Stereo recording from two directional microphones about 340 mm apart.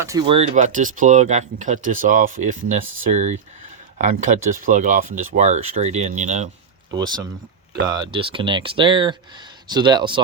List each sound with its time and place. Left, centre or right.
0.0 s speech: centre